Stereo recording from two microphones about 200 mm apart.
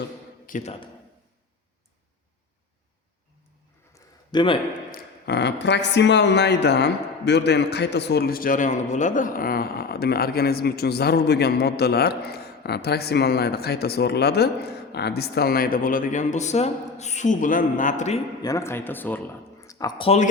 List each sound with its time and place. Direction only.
0.4 s speech: 35° left (ahead or behind)
3.9 s a sound: 20° left (ahead or behind)
4.9 s speech: 55° left (ahead or behind); by 18.2 s 35° left (ahead or behind)
18.4 s speech: 15° left (ahead or behind)